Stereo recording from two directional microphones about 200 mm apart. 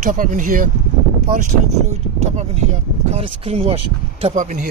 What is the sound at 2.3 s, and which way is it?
Speech, 35° right (ahead or behind).